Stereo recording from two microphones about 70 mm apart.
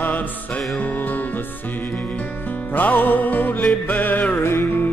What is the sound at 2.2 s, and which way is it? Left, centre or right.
Music, left.